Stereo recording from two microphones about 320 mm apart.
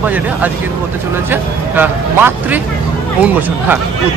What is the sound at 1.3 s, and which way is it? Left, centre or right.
A man's voice, centre.